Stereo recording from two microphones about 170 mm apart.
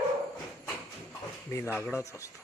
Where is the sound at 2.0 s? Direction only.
20° left (ahead or behind).